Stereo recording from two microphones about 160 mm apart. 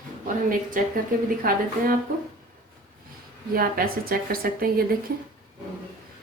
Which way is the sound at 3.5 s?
65° right (ahead or behind).